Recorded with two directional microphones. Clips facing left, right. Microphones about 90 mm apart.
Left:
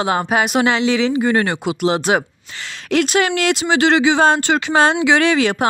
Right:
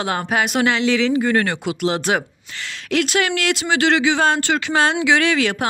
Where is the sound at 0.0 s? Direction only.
20° left (ahead or behind).